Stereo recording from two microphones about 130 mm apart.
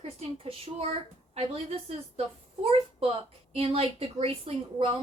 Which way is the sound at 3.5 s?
50° right (ahead or behind).